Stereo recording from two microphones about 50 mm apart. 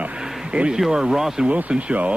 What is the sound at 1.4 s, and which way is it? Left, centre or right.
Speech, right.